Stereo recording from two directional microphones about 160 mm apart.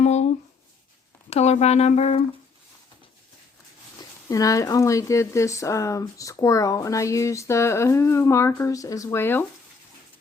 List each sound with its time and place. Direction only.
0.0 s a sound: 45° left (ahead or behind)
1.3 s speech: 45° left (ahead or behind)
4.3 s speech: 20° left (ahead or behind)